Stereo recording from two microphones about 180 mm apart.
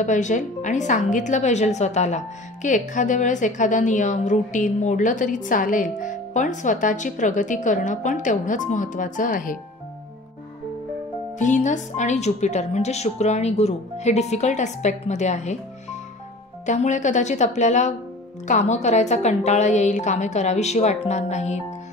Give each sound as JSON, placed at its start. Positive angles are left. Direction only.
{"t": 0.0, "sound": "a woman's voice", "side_deg": 45}
{"t": 11.3, "sound": "a woman's voice", "side_deg": 45}
{"t": 16.6, "sound": "a woman's voice", "side_deg": 40}